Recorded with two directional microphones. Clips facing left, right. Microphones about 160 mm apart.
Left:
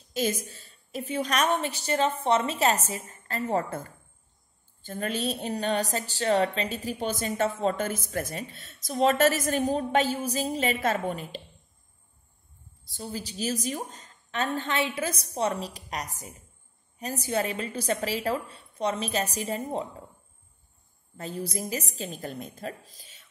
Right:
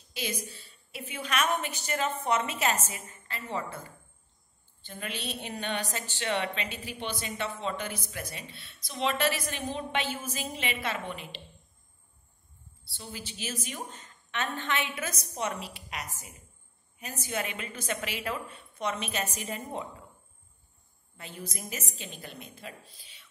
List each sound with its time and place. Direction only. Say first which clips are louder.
0.1 s a woman's voice: left 8 dB; 45° left (ahead or behind)
12.8 s a woman's voice: left 7 dB; 40° left (ahead or behind)
21.2 s a woman's voice: left 8 dB; 35° left (ahead or behind)